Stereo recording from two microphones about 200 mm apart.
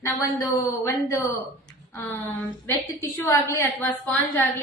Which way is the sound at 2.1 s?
10° left (ahead or behind).